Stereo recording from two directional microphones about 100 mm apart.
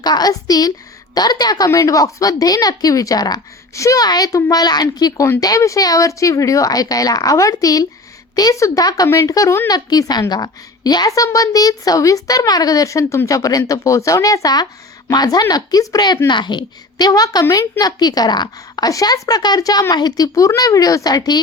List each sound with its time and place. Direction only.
0.0 s a woman's voice: 40° left (ahead or behind)